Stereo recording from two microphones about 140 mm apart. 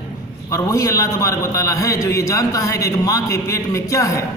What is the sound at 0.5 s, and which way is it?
A man's voice, 25° left (ahead or behind).